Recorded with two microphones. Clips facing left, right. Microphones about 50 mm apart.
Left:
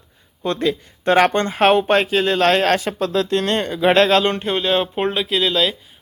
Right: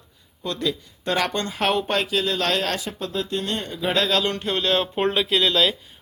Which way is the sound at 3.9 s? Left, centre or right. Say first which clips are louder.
Left 6 dB; left.